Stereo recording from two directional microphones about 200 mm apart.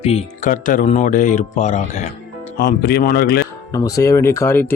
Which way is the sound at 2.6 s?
50° left (ahead or behind).